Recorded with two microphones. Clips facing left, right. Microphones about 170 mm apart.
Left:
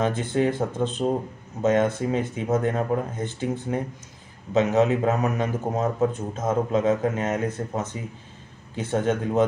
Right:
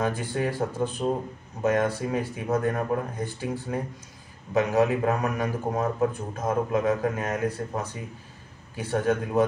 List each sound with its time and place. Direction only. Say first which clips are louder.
0.0 s a man's voice: left 4 dB; 20° left (ahead or behind)